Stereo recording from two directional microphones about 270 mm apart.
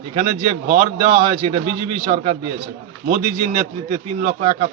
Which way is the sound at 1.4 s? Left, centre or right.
Right.